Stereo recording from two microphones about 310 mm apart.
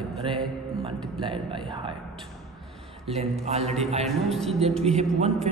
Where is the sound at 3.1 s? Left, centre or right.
Centre.